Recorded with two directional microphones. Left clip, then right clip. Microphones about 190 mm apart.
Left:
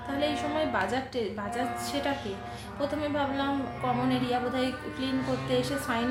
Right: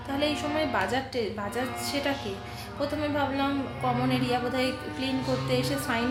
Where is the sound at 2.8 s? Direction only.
10° right (ahead or behind).